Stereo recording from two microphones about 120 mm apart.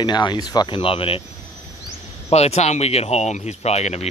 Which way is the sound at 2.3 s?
65° left (ahead or behind).